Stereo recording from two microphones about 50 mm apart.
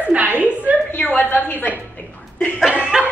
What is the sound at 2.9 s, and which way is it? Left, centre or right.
Snicker, centre.